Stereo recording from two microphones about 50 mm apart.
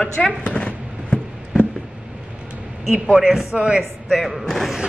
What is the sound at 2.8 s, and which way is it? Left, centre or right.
A woman's voice, centre.